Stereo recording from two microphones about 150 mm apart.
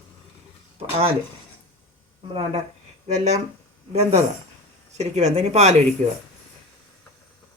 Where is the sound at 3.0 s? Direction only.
50° right (ahead or behind).